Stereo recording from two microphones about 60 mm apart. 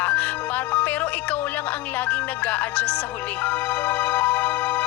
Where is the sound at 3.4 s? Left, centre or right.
Left.